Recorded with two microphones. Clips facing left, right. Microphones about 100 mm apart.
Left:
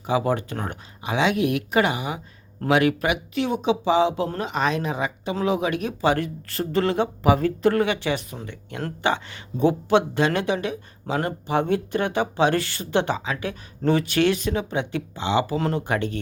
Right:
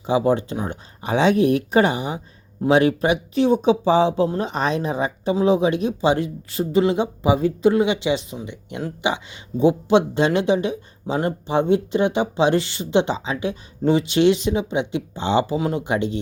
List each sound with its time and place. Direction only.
0.0 s speech: 25° right (ahead or behind)
0.5 s speech: 10° right (ahead or behind)
1.0 s speech: 35° right (ahead or behind)
5.3 s speech: 20° right (ahead or behind)
15.2 s speech: 30° right (ahead or behind)
15.5 s speech: 15° right (ahead or behind)